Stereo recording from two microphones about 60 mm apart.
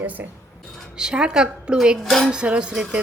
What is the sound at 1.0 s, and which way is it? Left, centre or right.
A woman's voice, centre.